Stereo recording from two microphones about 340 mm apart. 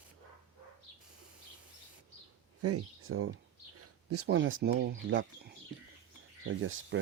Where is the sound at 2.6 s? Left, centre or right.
Right.